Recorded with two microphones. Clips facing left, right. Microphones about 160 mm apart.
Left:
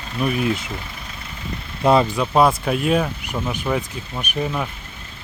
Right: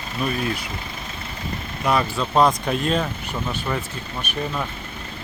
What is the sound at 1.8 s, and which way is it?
Speech, 30° left (ahead or behind).